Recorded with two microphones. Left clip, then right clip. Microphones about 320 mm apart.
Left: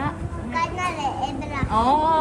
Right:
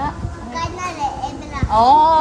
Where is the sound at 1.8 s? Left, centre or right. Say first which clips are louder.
Right 8 dB; right.